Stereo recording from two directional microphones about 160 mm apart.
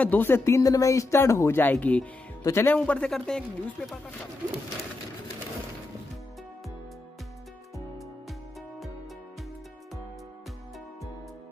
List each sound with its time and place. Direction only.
0.0 s speech: 10° left (ahead or behind)